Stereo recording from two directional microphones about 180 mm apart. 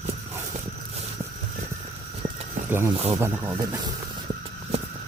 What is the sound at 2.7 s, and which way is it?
Speech, 15° right (ahead or behind).